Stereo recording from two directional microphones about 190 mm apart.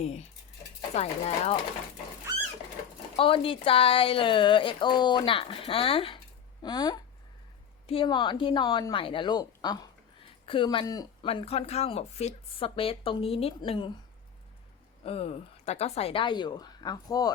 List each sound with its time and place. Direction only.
0.9 s speech: 35° left (ahead or behind)
3.2 s speech: 30° left (ahead or behind)
15.0 s speech: 30° left (ahead or behind)